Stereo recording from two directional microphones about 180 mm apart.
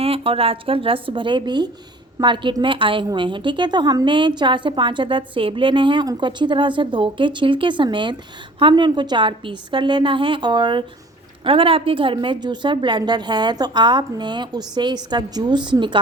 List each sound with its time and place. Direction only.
0.0 s a woman's voice: 30° right (ahead or behind)